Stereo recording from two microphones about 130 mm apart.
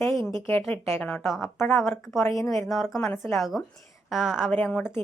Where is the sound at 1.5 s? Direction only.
15° left (ahead or behind).